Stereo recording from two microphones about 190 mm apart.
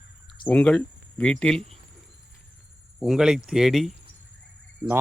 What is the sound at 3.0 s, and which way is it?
Speech, 5° right (ahead or behind).